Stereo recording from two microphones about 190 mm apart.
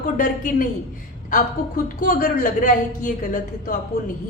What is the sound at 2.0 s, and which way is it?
A woman's voice, 45° left (ahead or behind).